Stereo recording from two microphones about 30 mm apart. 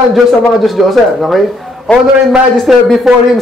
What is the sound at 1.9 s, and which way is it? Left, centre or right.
Speech, left.